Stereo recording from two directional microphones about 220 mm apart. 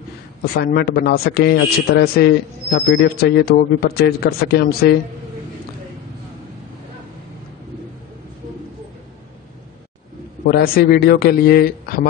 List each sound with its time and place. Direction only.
0.6 s a man's voice: 40° left (ahead or behind)
10.4 s a man's voice: 40° left (ahead or behind)